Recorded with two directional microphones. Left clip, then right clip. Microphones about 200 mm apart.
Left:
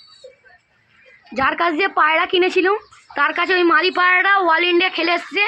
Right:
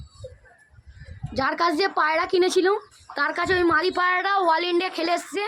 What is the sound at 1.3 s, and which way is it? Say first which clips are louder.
A woman's voice: left 5 dB; 25° left (ahead or behind).